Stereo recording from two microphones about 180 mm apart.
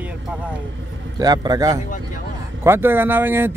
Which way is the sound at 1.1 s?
20° right (ahead or behind).